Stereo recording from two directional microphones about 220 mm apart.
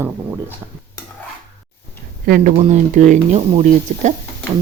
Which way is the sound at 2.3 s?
35° right (ahead or behind).